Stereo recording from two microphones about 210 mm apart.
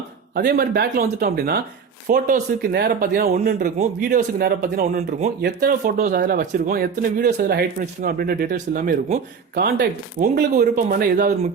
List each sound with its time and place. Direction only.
0.3 s speech: 45° right (ahead or behind)